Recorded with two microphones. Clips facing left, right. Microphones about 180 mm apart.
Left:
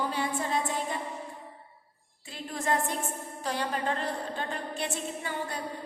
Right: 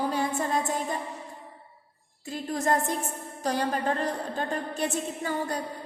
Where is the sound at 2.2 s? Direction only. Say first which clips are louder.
Right 4 dB; 40° right (ahead or behind).